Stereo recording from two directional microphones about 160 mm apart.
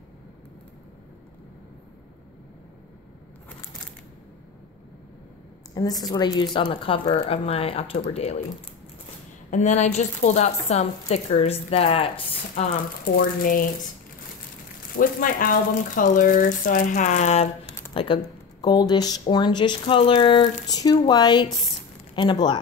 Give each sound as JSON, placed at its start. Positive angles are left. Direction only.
{"t": 5.8, "sound": "a woman's voice", "side_deg": 25}
{"t": 9.5, "sound": "speech", "side_deg": 50}
{"t": 13.0, "sound": "speech", "side_deg": 65}
{"t": 15.0, "sound": "speech", "side_deg": 60}
{"t": 17.9, "sound": "a woman's voice", "side_deg": 30}